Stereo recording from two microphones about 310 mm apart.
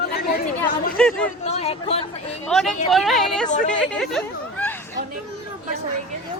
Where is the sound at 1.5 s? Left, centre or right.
Centre.